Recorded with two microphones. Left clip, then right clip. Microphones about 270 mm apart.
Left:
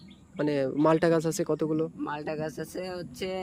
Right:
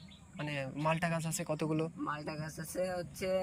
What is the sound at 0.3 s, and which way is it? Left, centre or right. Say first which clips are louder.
Speech: left 13 dB; centre.